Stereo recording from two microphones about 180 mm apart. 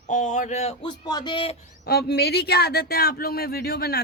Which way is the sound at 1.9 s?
60° left (ahead or behind).